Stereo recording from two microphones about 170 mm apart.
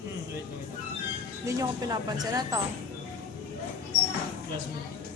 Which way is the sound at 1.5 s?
20° right (ahead or behind).